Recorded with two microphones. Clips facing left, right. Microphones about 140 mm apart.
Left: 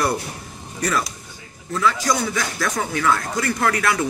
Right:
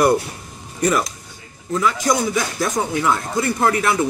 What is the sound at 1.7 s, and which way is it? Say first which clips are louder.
A man's voice: right 2 dB; 20° right (ahead or behind).